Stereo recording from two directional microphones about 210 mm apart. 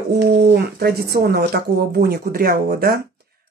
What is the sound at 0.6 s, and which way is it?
Speech, 45° right (ahead or behind).